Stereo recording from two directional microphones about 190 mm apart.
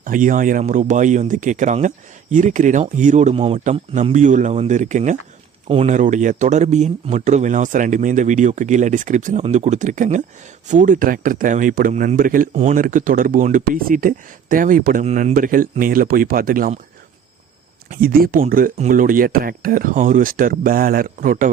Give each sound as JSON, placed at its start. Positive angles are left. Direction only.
{"t": 0.0, "sound": "speech", "side_deg": -45}
{"t": 17.8, "sound": "speech", "side_deg": -50}